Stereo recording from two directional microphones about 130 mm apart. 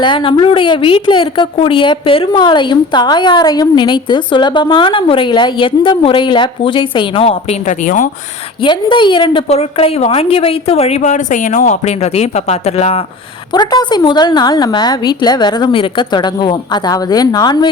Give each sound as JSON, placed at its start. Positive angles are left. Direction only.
{"t": 0.0, "sound": "a woman's voice", "side_deg": 40}
{"t": 7.7, "sound": "speech", "side_deg": 80}
{"t": 8.6, "sound": "a woman's voice", "side_deg": 40}
{"t": 9.5, "sound": "a woman's voice", "side_deg": 50}
{"t": 13.5, "sound": "a woman's voice", "side_deg": 30}